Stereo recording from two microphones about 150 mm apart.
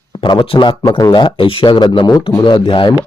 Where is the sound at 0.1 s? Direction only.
30° left (ahead or behind).